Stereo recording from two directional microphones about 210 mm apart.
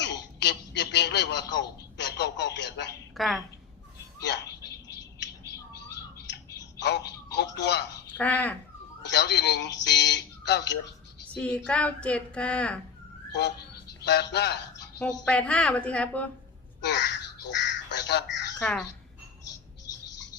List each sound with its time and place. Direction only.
0.0 s a sound: 55° left (ahead or behind)
3.2 s a woman's voice: centre (ahead or behind)
4.2 s a sound: 55° left (ahead or behind)
6.1 s telephone: 55° left (ahead or behind)
8.2 s speech: 5° left (ahead or behind)
9.0 s a sound: 55° left (ahead or behind)
11.3 s speech: 5° left (ahead or behind)
14.0 s speech: 50° left (ahead or behind)
15.0 s speech: 5° left (ahead or behind)
16.8 s a child's voice: 55° left (ahead or behind)
17.5 s crow: 55° left (ahead or behind)